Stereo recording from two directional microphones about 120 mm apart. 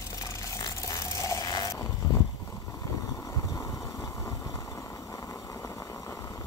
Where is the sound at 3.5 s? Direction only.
25° left (ahead or behind).